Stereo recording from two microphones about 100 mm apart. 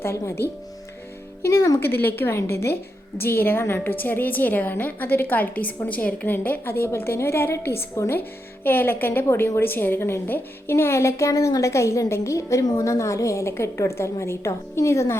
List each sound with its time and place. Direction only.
0.0 s a woman's voice: 25° left (ahead or behind)
1.4 s a woman's voice: 30° left (ahead or behind)